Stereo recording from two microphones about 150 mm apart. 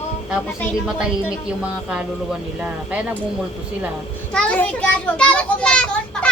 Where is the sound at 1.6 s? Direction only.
5° right (ahead or behind).